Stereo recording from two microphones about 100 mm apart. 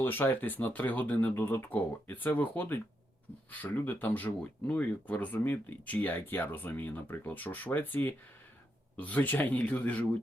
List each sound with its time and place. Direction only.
0.0 s speech: 20° left (ahead or behind)